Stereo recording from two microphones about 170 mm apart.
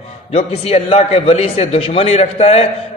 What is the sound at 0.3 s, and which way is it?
A man's voice, 40° left (ahead or behind).